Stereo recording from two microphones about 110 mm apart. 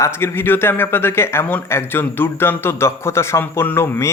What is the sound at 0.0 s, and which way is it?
Speech, 20° left (ahead or behind).